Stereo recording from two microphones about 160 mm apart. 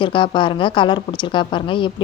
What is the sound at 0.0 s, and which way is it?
A woman's voice, 30° left (ahead or behind).